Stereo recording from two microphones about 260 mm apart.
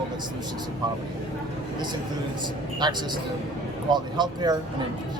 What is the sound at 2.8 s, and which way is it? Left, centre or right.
Speech, centre.